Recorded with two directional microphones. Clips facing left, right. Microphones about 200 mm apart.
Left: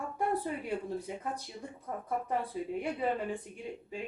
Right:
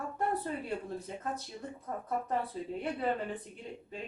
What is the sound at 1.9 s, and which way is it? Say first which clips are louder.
Speech: even; 10° left (ahead or behind).